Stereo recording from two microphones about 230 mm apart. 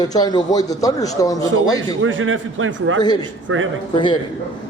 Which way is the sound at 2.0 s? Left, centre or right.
Right.